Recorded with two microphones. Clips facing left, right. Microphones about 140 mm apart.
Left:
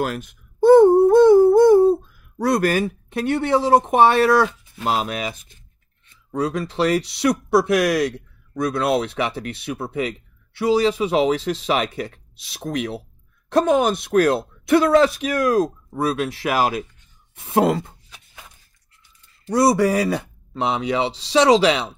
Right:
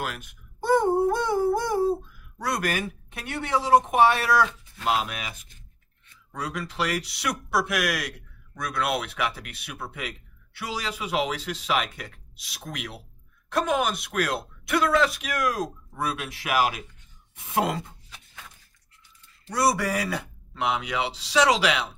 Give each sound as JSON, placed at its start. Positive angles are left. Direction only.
{"t": 0.0, "sound": "a sound", "side_deg": 35}
{"t": 2.5, "sound": "speech", "side_deg": 35}
{"t": 19.5, "sound": "speech", "side_deg": 30}